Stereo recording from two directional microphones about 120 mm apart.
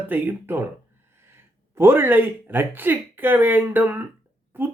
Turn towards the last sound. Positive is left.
turn(degrees=-15)  # may be behind; listen again after turning